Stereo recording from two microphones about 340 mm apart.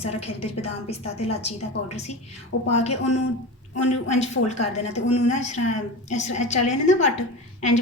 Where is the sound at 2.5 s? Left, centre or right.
Left.